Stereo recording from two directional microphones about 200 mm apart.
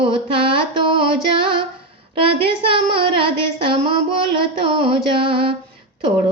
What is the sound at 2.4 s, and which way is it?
Child singing, 25° right (ahead or behind).